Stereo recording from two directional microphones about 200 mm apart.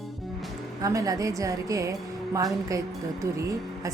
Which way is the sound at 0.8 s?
15° right (ahead or behind).